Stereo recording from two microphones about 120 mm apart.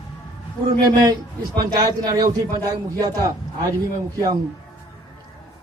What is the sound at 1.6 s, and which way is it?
Speech, 35° right (ahead or behind).